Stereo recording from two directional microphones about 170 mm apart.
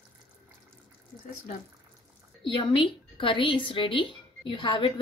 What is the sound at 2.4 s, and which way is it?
A woman's voice, 30° left (ahead or behind).